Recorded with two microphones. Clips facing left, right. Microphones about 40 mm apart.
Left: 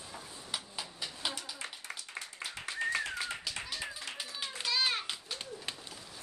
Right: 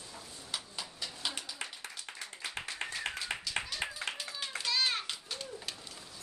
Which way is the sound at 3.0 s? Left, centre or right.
Right.